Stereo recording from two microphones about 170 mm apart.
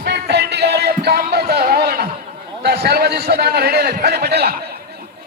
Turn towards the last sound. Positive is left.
turn(degrees=-70)  # may be behind; listen again after turning